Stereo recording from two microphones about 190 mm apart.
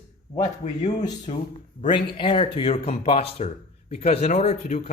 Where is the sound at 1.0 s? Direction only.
20° left (ahead or behind).